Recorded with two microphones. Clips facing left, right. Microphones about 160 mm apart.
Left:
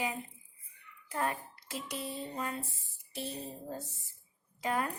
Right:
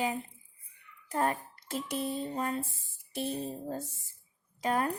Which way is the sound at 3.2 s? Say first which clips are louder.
Right 6 dB; 55° right (ahead or behind).